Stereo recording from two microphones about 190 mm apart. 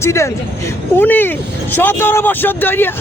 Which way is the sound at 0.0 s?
15° left (ahead or behind).